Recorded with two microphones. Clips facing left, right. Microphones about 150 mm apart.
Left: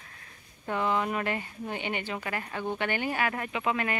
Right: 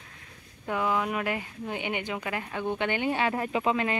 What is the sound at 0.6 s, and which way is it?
Speech, 5° right (ahead or behind).